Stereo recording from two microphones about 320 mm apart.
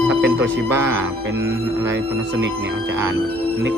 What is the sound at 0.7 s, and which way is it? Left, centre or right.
Speech, centre.